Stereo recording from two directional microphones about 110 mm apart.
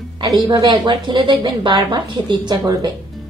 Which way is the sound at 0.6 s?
40° right (ahead or behind).